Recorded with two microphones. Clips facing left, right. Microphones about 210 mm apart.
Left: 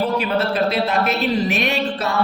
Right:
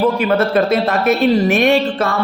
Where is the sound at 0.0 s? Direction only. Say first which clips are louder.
Right 5 dB; 50° right (ahead or behind).